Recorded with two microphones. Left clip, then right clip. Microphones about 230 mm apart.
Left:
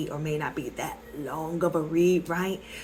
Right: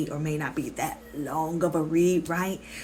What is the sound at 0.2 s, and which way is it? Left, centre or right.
Speech, right.